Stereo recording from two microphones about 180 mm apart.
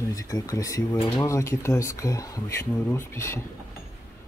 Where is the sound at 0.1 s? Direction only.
20° left (ahead or behind).